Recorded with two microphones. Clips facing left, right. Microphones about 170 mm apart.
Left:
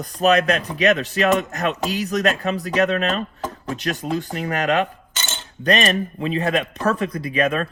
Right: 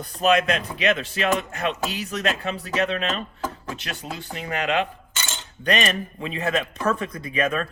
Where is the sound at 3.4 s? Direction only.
25° left (ahead or behind).